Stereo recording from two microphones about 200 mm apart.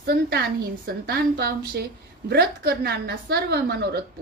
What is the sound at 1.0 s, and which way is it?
A woman's voice, 50° right (ahead or behind).